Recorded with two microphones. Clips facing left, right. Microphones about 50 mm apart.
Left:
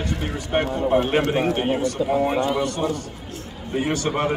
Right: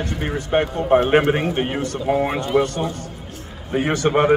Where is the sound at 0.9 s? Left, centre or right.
Right.